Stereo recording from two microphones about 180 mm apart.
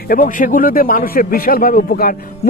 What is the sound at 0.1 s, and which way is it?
A man's voice, 50° left (ahead or behind).